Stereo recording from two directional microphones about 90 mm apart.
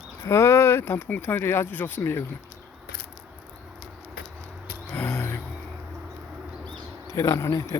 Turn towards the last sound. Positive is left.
turn(degrees=35)  # may be behind; listen again after turning